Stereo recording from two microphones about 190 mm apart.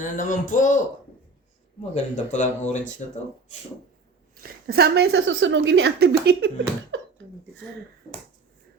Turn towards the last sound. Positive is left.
turn(degrees=-90)